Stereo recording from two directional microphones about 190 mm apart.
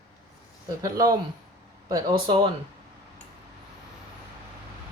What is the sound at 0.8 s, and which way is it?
Speech, 20° right (ahead or behind).